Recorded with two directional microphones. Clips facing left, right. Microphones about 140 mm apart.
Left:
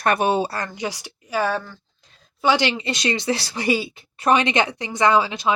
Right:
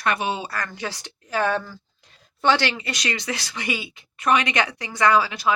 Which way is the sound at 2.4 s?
15° left (ahead or behind).